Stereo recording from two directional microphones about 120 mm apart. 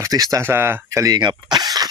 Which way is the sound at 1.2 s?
40° right (ahead or behind).